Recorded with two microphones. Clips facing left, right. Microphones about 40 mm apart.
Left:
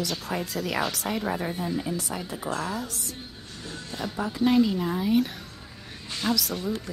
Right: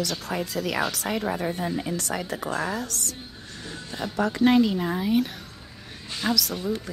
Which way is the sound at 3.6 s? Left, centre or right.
Centre.